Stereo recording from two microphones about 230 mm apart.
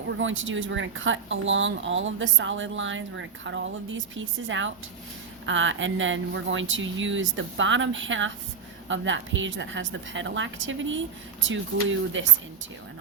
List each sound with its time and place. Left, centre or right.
0.2 s a woman's voice: right